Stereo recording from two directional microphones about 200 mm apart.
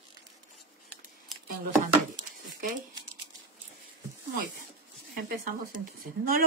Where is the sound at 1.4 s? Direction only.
40° right (ahead or behind).